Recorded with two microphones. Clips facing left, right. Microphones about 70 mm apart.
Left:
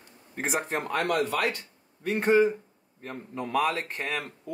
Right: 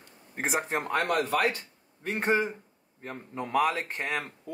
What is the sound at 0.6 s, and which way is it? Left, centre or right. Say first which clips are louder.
Speech: even; right.